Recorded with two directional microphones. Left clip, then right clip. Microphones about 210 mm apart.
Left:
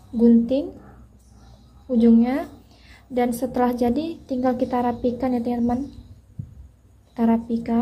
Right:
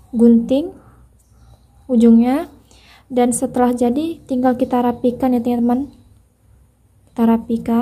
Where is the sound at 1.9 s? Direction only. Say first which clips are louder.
Right 5 dB; 30° right (ahead or behind).